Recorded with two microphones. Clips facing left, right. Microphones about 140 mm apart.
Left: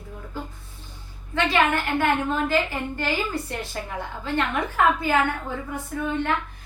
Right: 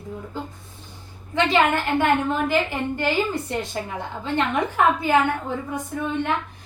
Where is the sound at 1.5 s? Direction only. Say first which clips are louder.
Right 2 dB; 20° right (ahead or behind).